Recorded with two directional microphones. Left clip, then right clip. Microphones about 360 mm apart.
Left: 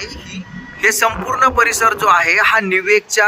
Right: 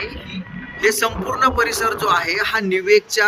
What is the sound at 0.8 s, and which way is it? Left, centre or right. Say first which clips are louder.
Speech: left 4 dB; centre.